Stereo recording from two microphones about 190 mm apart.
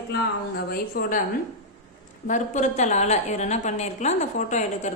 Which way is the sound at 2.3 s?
40° left (ahead or behind).